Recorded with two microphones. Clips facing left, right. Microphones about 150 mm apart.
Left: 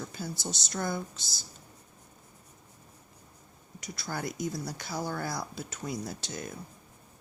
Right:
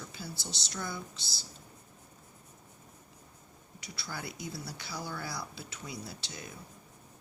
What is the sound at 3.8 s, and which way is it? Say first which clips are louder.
Speech: left 6 dB; 45° left (ahead or behind).